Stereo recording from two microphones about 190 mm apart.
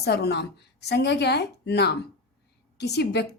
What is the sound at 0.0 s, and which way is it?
A woman's voice, 60° left (ahead or behind).